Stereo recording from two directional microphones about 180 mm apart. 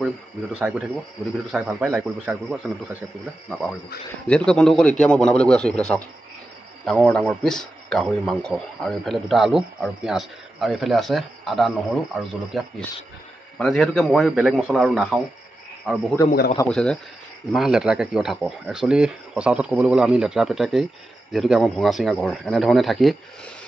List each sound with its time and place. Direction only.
0.6 s a man's voice: centre (ahead or behind)
3.4 s speech: 5° left (ahead or behind)
16.3 s a man's voice: 55° left (ahead or behind)
16.6 s speech: 5° left (ahead or behind)